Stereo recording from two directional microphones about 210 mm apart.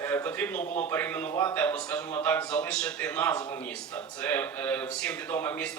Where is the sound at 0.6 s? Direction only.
35° left (ahead or behind).